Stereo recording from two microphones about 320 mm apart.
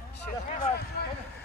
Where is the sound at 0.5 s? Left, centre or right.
Left.